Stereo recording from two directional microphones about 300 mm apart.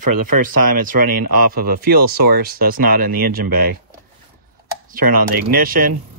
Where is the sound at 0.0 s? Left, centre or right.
Right.